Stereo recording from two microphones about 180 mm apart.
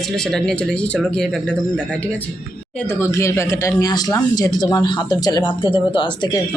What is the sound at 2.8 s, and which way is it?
Speech, 15° left (ahead or behind).